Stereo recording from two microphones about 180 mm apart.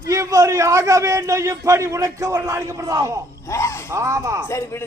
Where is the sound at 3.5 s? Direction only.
15° left (ahead or behind).